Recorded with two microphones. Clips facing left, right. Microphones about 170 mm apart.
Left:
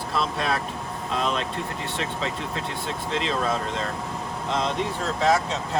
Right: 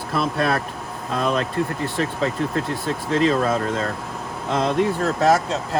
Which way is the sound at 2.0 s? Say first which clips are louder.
Right 8 dB; 45° right (ahead or behind).